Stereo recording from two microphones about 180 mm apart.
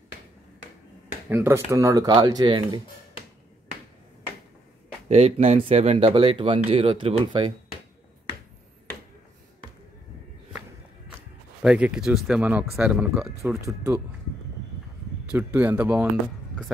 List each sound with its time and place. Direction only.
1.0 s speech: 10° right (ahead or behind)
5.0 s speech: 35° right (ahead or behind)
11.6 s speech: 5° right (ahead or behind)
13.7 s speech: 15° right (ahead or behind)
15.2 s speech: 10° right (ahead or behind)